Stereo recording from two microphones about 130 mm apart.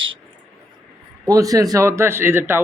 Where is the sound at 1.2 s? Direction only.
25° right (ahead or behind).